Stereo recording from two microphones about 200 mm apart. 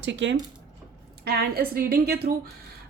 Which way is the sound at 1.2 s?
50° right (ahead or behind).